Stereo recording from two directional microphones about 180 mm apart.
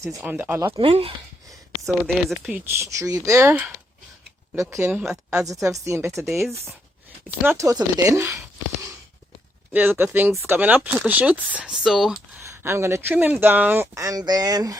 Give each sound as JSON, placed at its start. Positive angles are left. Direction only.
{"t": 0.2, "sound": "speech", "side_deg": -10}
{"t": 0.7, "sound": "speech", "side_deg": -30}
{"t": 1.9, "sound": "speech", "side_deg": 0}
{"t": 2.6, "sound": "speech", "side_deg": -15}
{"t": 4.5, "sound": "speech", "side_deg": -15}
{"t": 5.6, "sound": "speech", "side_deg": -15}
{"t": 9.7, "sound": "speech", "side_deg": -10}
{"t": 12.4, "sound": "speech", "side_deg": -15}